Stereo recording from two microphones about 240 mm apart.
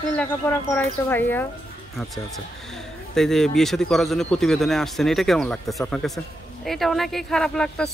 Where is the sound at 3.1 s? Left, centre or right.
Centre.